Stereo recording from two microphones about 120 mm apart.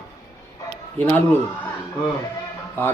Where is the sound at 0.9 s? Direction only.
15° left (ahead or behind).